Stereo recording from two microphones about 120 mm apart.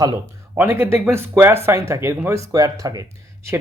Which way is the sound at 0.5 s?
20° right (ahead or behind).